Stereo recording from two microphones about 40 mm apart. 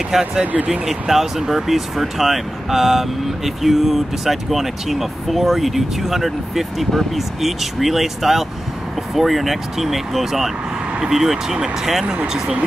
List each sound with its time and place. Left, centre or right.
0.2 s speech: right
0.7 s speech: centre